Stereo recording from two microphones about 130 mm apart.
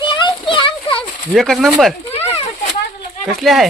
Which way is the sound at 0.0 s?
35° left (ahead or behind).